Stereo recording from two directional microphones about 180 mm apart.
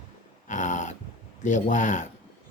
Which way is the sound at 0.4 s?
45° left (ahead or behind).